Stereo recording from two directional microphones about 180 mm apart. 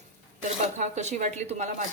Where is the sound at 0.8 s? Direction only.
40° right (ahead or behind).